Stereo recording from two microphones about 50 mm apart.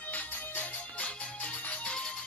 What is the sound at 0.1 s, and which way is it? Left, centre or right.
Music, left.